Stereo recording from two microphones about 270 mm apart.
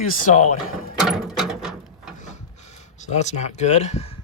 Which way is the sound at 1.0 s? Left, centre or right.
Centre.